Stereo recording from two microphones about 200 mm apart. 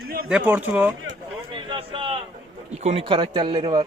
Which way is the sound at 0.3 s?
5° right (ahead or behind).